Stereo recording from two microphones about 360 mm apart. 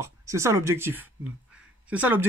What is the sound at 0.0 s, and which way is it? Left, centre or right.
Speech, centre.